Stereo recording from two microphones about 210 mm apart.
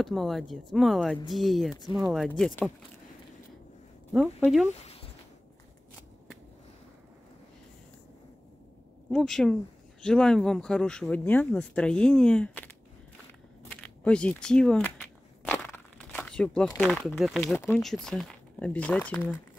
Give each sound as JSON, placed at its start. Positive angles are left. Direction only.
{"t": 0.0, "sound": "speech", "side_deg": 0}
{"t": 4.6, "sound": "speech", "side_deg": 30}
{"t": 9.1, "sound": "speech", "side_deg": 5}
{"t": 13.7, "sound": "a sound", "side_deg": 5}
{"t": 16.7, "sound": "speech", "side_deg": 5}